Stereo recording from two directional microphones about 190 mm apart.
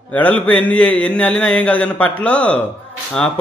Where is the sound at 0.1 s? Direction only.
10° left (ahead or behind).